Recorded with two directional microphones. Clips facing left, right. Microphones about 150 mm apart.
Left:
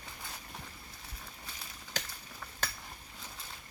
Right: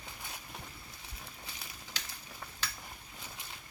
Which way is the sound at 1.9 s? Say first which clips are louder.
Left 8 dB; 45° left (ahead or behind).